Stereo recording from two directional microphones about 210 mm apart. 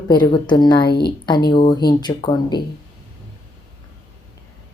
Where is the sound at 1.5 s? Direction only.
20° left (ahead or behind).